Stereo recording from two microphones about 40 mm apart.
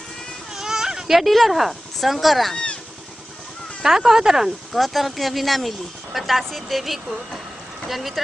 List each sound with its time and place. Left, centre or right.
0.6 s baby cry: centre
1.2 s speech: centre
2.5 s cat: left
3.8 s speech: centre
4.7 s speech: centre